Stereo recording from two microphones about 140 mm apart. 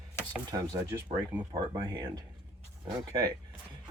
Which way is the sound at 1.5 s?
30° right (ahead or behind).